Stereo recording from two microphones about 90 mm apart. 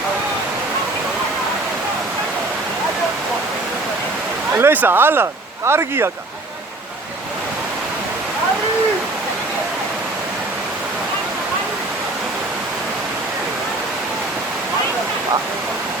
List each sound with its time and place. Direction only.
4.5 s speech: 20° right (ahead or behind)